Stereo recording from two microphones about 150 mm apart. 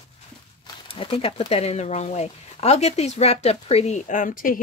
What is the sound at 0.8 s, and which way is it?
A woman's voice, 40° left (ahead or behind).